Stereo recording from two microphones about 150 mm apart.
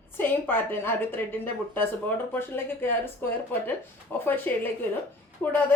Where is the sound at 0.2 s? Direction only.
15° left (ahead or behind).